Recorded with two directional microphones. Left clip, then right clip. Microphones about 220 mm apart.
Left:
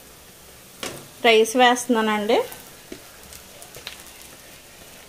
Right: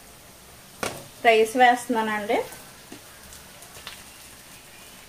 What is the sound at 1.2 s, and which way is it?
A woman's voice, 45° left (ahead or behind).